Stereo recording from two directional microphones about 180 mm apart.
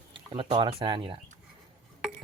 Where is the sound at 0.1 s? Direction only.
30° right (ahead or behind).